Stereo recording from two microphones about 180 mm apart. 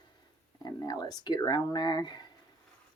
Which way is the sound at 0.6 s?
25° left (ahead or behind).